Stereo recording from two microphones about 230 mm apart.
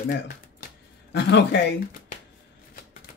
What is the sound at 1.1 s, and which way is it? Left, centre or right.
Speech, left.